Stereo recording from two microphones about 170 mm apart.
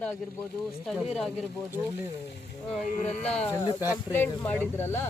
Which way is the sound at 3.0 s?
55° left (ahead or behind).